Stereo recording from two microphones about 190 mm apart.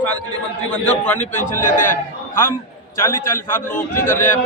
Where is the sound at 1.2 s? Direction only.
40° left (ahead or behind).